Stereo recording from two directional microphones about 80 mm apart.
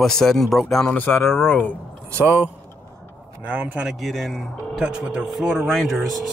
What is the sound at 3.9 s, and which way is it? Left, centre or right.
Speech, centre.